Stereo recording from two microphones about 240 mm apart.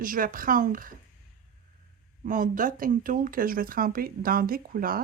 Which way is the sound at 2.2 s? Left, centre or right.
Right.